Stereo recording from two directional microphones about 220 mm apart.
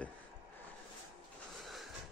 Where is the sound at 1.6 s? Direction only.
Centre (ahead or behind).